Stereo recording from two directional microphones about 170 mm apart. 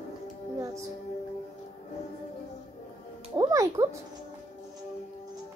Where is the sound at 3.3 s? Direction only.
20° right (ahead or behind).